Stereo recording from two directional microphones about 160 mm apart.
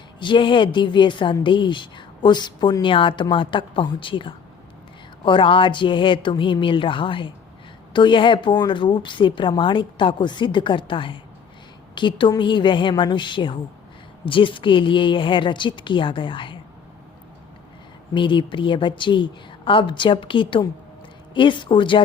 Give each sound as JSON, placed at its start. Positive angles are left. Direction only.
{"t": 0.2, "sound": "a woman's voice", "side_deg": 30}
{"t": 18.1, "sound": "a woman's voice", "side_deg": 30}